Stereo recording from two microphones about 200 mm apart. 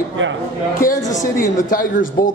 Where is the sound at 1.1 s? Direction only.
40° left (ahead or behind).